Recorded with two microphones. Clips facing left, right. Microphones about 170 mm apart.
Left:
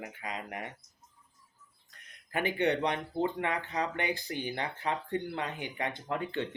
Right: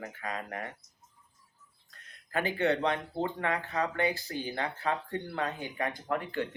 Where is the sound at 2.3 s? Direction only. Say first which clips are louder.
Right 1 dB; 15° left (ahead or behind).